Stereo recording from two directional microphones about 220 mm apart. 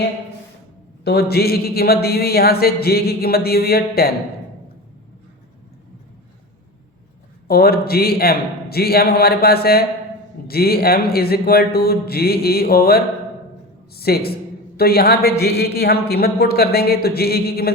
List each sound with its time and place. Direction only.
1.0 s speech: 45° left (ahead or behind)
7.4 s speech: 45° left (ahead or behind)